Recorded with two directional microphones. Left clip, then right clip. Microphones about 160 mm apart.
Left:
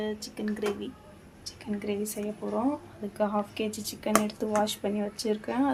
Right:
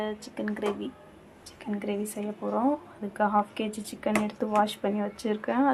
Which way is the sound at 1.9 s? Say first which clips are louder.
Even; 15° right (ahead or behind).